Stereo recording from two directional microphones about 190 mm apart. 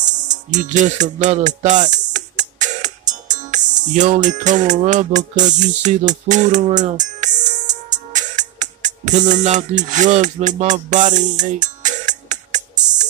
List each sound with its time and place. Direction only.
0.0 s music: 40° right (ahead or behind)